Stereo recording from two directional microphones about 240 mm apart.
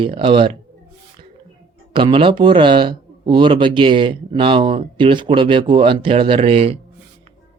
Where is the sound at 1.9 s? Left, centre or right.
Right.